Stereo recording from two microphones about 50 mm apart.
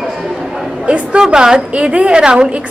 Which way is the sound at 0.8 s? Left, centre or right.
Right.